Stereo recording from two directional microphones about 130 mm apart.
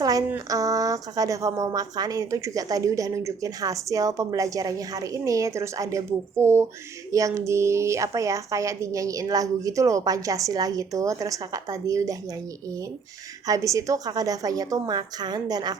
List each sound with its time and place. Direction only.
0.0 s a sound: 25° right (ahead or behind)
0.3 s a woman's voice: 25° right (ahead or behind)
13.5 s a woman's voice: 25° right (ahead or behind)